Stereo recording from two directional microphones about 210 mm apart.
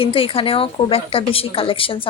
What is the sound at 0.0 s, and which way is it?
A woman's voice, 25° left (ahead or behind).